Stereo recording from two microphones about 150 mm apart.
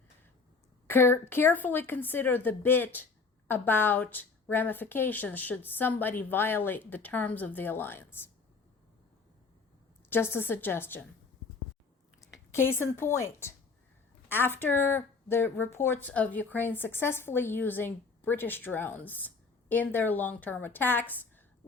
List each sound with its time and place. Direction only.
0.9 s a woman's voice: 15° left (ahead or behind)
10.1 s a woman's voice: 15° left (ahead or behind)
12.5 s a woman's voice: 15° left (ahead or behind)